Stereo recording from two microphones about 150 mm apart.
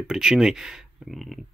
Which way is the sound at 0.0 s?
5° right (ahead or behind).